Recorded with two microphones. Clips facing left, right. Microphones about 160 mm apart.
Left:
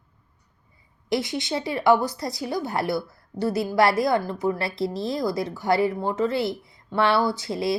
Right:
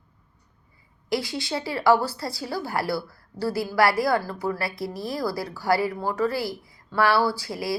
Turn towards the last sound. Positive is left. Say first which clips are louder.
# left 2 dB
turn(degrees=25)  # may be behind; listen again after turning